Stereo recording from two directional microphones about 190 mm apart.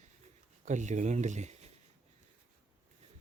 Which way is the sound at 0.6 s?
40° right (ahead or behind).